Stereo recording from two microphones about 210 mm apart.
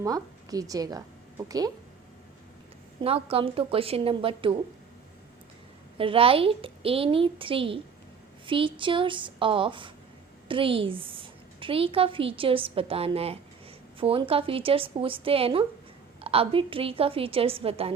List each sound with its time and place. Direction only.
0.0 s a woman's voice: 15° right (ahead or behind)
3.0 s a woman's voice: 25° right (ahead or behind)
6.0 s a woman's voice: 25° right (ahead or behind)